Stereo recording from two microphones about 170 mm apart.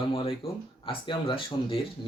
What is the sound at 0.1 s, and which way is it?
Speech, 30° left (ahead or behind).